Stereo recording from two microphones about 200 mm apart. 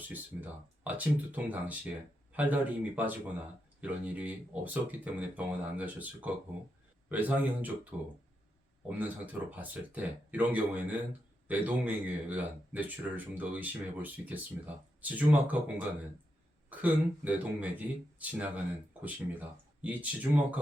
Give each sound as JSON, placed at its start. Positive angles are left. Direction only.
{"t": 0.1, "sound": "speech", "side_deg": -10}
{"t": 9.0, "sound": "speech", "side_deg": -10}